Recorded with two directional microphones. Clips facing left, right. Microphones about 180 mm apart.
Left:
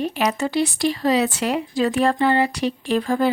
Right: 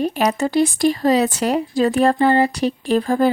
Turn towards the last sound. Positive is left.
turn(degrees=-40)  # may be behind; listen again after turning